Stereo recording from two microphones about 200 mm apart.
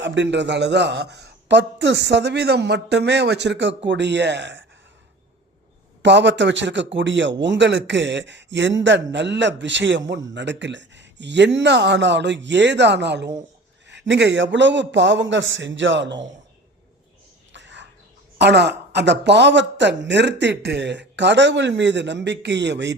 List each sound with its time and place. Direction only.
0.0 s speech: 65° right (ahead or behind)
6.0 s speech: 60° right (ahead or behind)
17.5 s whispering: 60° right (ahead or behind)
18.3 s speech: 60° right (ahead or behind)